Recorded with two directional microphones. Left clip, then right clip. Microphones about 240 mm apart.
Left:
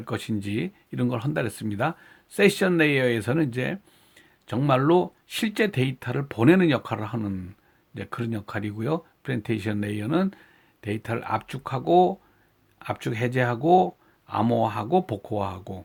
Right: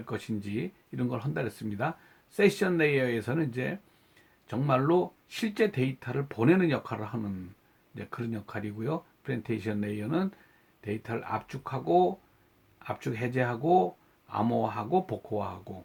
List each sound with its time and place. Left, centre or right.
0.0 s speech: left